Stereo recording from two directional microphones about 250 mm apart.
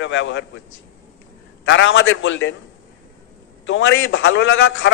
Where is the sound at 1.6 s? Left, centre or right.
Left.